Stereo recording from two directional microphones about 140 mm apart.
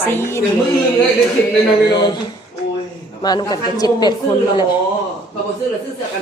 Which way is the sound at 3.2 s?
30° left (ahead or behind).